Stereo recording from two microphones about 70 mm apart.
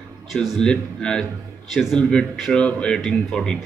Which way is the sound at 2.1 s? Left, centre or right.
Centre.